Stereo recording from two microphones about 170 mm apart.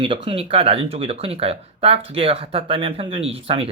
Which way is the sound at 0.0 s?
30° right (ahead or behind).